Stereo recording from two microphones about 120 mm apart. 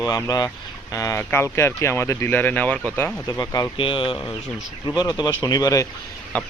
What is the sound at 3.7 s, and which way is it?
Speech, 45° left (ahead or behind).